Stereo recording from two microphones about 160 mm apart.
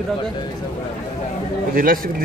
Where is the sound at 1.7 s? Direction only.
65° right (ahead or behind).